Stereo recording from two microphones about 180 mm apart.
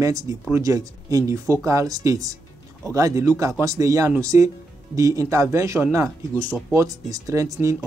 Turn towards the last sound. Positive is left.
turn(degrees=-15)  # may be behind; listen again after turning